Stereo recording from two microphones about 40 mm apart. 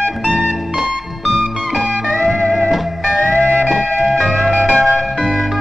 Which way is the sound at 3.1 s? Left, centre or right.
Right.